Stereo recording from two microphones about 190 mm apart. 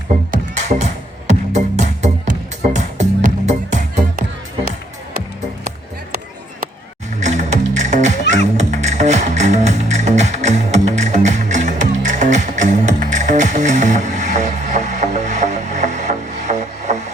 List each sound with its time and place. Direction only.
0.3 s music: 40° right (ahead or behind)
7.2 s music: 40° right (ahead or behind)